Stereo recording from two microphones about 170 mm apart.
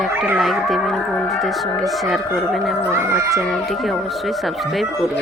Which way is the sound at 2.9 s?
15° right (ahead or behind).